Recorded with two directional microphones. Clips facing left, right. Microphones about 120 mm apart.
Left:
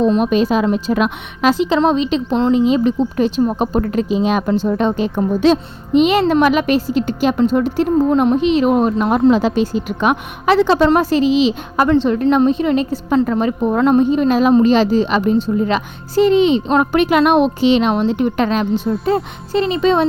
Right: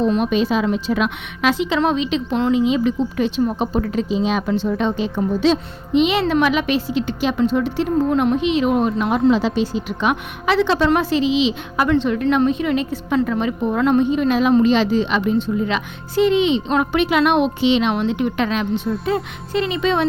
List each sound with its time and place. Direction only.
0.1 s a woman's voice: 45° left (ahead or behind)